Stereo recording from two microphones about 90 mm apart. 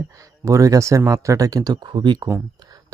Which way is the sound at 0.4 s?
35° right (ahead or behind).